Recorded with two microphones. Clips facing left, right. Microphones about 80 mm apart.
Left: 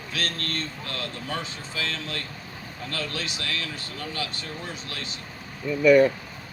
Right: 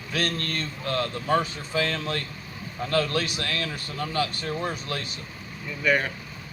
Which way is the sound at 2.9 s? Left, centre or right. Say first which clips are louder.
Right 8 dB; right.